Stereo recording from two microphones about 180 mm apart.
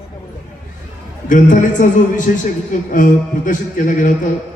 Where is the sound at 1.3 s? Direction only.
45° left (ahead or behind).